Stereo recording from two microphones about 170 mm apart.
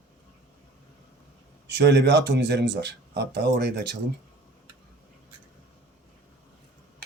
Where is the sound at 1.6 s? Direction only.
75° right (ahead or behind).